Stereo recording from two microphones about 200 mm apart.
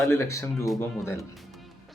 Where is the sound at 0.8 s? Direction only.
15° left (ahead or behind).